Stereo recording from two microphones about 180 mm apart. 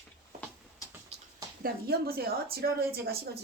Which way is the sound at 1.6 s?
55° right (ahead or behind).